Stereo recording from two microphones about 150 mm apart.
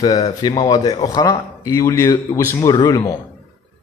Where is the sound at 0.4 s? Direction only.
25° left (ahead or behind).